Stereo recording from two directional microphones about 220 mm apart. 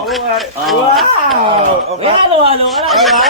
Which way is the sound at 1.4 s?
25° right (ahead or behind).